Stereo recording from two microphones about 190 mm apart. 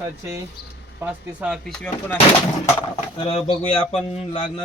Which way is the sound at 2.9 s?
30° left (ahead or behind).